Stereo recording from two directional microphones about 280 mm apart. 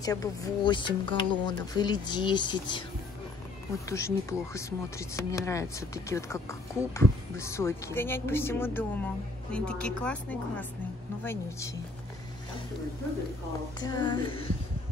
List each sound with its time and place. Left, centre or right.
0.0 s speech: centre
3.9 s speech: centre
13.7 s speech: centre